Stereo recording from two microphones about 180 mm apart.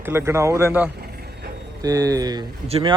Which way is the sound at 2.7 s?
35° right (ahead or behind).